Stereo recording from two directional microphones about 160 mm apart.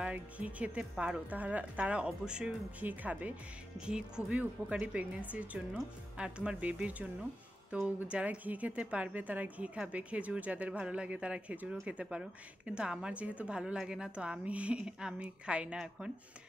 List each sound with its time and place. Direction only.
0.0 s a woman's voice: 10° right (ahead or behind)